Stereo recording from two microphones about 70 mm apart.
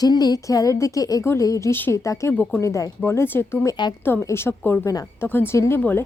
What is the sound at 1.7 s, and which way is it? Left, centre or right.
Speech, left.